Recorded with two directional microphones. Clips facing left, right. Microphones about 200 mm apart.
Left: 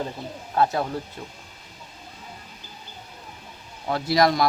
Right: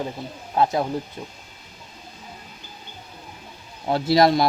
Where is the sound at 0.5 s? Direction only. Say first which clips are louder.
Right 2 dB; 20° right (ahead or behind).